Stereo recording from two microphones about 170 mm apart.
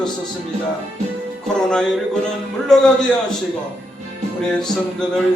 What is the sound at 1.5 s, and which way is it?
Speech, 5° left (ahead or behind).